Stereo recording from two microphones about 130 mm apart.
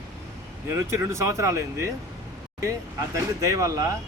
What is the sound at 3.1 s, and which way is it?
Speech, 25° right (ahead or behind).